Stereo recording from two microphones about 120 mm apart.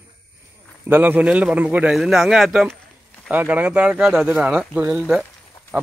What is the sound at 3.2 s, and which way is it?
A man's voice, 15° right (ahead or behind).